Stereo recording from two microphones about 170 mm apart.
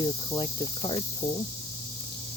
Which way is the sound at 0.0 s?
25° left (ahead or behind).